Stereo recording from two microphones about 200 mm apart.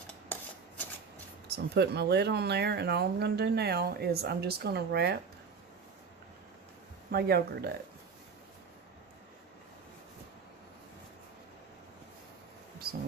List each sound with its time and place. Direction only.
1.5 s speech: 55° right (ahead or behind)
7.1 s speech: 50° right (ahead or behind)